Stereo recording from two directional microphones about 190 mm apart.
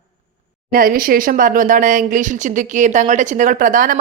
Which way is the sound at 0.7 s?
50° right (ahead or behind).